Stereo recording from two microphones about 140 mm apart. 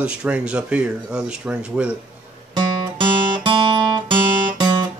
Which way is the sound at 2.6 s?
35° right (ahead or behind).